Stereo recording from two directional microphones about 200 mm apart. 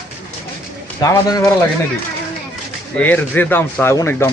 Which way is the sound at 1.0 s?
15° left (ahead or behind).